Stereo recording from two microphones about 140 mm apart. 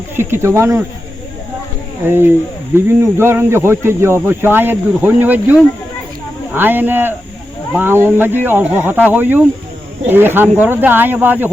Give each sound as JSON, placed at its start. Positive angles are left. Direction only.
{"t": 0.2, "sound": "speech", "side_deg": -20}
{"t": 2.0, "sound": "speech", "side_deg": -15}